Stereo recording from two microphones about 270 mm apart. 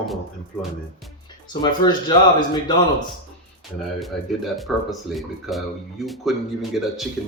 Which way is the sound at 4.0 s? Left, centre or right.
Centre.